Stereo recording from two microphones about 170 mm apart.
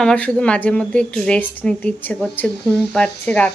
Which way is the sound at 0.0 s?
5° left (ahead or behind).